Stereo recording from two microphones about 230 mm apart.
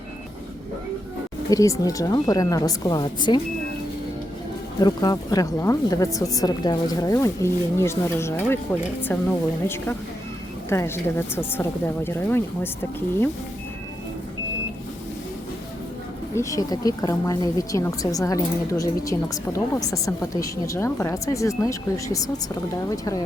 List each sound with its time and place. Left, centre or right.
1.5 s a woman's voice: centre
4.8 s a woman's voice: centre
16.3 s a woman's voice: centre